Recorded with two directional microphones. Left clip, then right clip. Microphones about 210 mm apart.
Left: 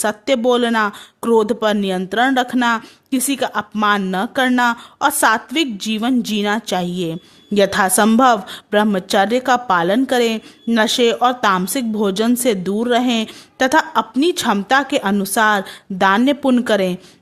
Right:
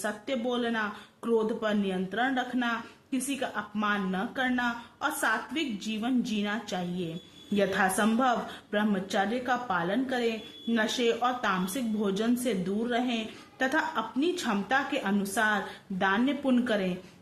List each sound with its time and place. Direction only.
0.0 s a woman's voice: 55° left (ahead or behind)